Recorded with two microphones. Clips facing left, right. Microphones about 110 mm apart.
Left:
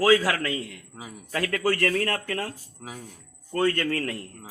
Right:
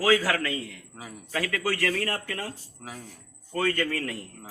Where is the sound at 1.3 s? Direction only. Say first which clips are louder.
Left 3 dB; 50° left (ahead or behind).